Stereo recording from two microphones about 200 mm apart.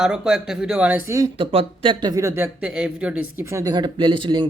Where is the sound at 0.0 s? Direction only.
5° right (ahead or behind).